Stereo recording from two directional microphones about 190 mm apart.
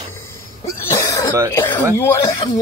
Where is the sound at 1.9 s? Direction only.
15° left (ahead or behind).